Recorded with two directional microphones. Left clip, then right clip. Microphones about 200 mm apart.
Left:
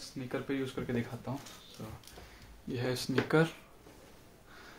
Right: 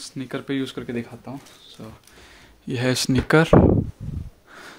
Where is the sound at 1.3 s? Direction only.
45° right (ahead or behind).